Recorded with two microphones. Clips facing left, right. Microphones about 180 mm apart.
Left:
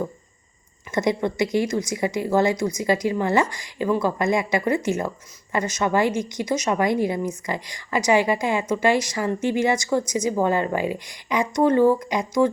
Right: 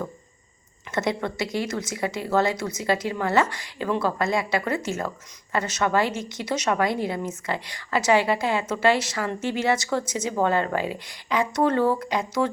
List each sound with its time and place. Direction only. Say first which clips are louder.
0.9 s a woman's voice: left 4 dB; 15° left (ahead or behind)